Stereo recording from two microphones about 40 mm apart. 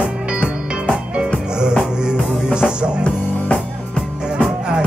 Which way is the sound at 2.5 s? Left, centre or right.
Right.